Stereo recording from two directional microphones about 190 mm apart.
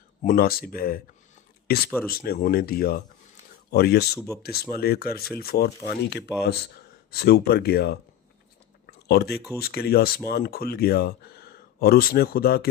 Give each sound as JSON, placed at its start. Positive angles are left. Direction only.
{"t": 0.3, "sound": "speech", "side_deg": 50}
{"t": 8.9, "sound": "a sound", "side_deg": 60}
{"t": 9.6, "sound": "speech", "side_deg": 55}